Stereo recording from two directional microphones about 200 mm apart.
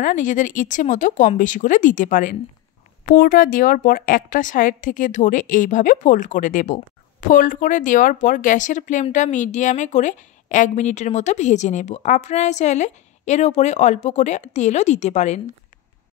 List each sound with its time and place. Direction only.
0.0 s a woman's voice: 40° left (ahead or behind)